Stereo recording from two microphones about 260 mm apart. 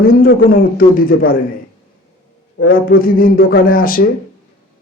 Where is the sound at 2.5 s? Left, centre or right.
Left.